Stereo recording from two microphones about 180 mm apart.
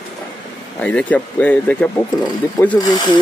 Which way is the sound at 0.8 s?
5° left (ahead or behind).